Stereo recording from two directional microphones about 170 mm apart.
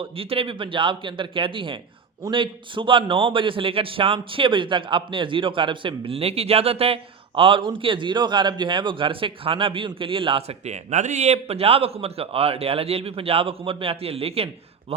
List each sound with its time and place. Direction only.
0.0 s a man's voice: 35° right (ahead or behind)
10.9 s a man's voice: 45° right (ahead or behind)